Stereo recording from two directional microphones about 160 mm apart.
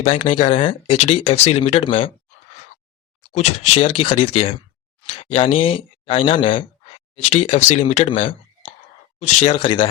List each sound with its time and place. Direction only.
0.0 s speech: 35° left (ahead or behind)
3.3 s speech: 40° left (ahead or behind)